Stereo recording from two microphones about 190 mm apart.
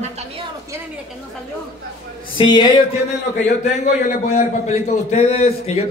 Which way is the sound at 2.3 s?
25° left (ahead or behind).